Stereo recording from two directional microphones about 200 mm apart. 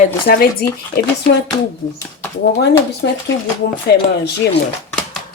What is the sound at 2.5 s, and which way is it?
A woman's voice, 60° left (ahead or behind).